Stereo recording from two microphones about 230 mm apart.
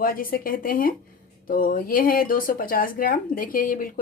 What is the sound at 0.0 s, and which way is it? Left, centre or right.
Speech, left.